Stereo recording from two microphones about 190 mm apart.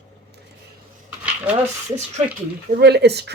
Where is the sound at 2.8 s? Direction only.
60° right (ahead or behind).